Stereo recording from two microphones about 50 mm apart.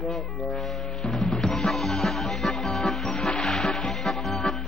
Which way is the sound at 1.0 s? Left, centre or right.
Centre.